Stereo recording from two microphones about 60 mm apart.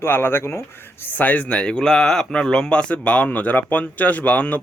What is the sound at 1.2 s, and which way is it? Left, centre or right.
Speech, left.